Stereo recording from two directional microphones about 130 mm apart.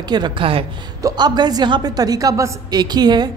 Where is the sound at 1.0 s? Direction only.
30° right (ahead or behind).